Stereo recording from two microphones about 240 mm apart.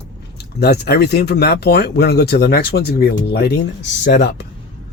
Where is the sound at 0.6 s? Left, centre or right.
Left.